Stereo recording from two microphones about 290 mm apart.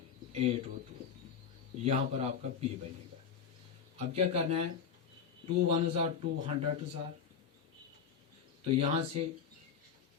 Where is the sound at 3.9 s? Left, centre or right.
Right.